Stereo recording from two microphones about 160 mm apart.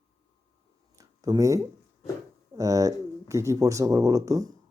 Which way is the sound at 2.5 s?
20° right (ahead or behind).